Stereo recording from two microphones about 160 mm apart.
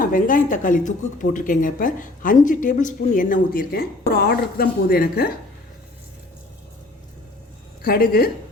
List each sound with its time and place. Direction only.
0.0 s speech: 60° left (ahead or behind)
7.9 s a woman's voice: 70° left (ahead or behind)